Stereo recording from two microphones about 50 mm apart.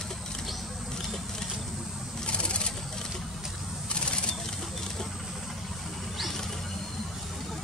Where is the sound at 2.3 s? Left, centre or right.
Left.